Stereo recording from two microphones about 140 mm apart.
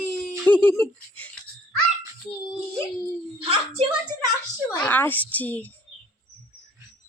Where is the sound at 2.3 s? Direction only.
30° left (ahead or behind).